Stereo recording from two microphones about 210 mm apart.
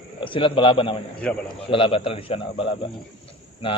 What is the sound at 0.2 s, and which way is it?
Speech, 25° left (ahead or behind).